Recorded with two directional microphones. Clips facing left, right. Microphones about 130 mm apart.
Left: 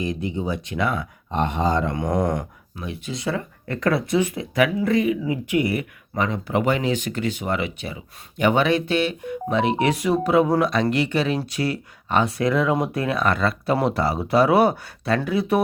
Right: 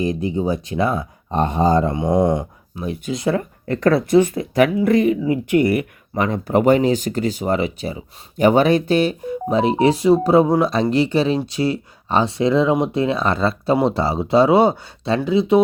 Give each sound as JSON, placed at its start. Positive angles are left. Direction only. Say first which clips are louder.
{"t": 0.0, "sound": "speech", "louder": "right 5 dB", "side_deg": -35}
{"t": 2.0, "sound": "a sound", "louder": "right 5 dB", "side_deg": -25}
{"t": 2.8, "sound": "speech", "louder": "right 6 dB", "side_deg": -45}